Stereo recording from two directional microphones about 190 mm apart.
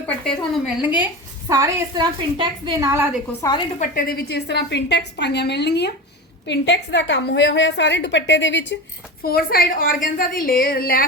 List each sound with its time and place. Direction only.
0.3 s a woman's voice: 5° right (ahead or behind)
3.4 s a woman's voice: 15° left (ahead or behind)
3.8 s a woman's voice: 50° left (ahead or behind); by 8.8 s 70° left (ahead or behind)
9.2 s a woman's voice: 50° left (ahead or behind)